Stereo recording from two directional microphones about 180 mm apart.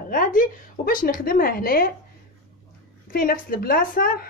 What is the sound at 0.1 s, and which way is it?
Speech, 50° left (ahead or behind).